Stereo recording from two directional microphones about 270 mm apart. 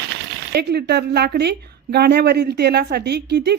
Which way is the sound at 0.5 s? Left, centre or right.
Right.